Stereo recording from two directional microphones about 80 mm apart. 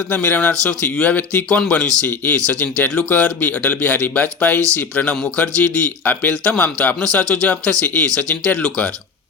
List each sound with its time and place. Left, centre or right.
0.1 s a man's voice: centre
2.0 s a man's voice: centre